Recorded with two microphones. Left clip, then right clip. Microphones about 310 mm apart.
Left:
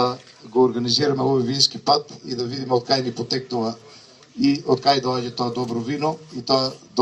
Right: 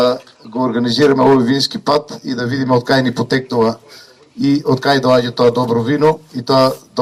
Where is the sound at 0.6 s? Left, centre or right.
Right.